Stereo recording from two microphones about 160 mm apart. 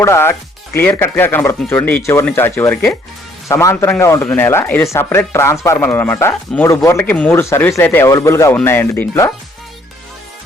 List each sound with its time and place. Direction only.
0.0 s speech: 15° left (ahead or behind)